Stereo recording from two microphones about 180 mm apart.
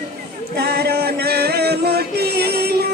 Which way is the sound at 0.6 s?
65° right (ahead or behind).